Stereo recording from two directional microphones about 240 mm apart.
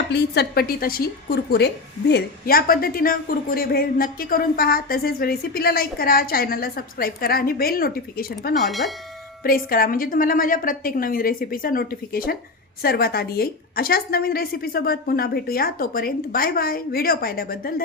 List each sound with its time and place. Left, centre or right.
0.1 s a woman's voice: left
8.6 s speech: centre
9.4 s a woman's voice: left